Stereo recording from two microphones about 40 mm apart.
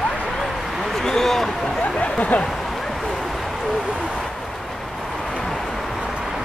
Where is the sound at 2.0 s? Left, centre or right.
Left.